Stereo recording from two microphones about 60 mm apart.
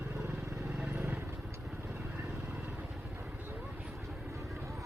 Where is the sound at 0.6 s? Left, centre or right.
Centre.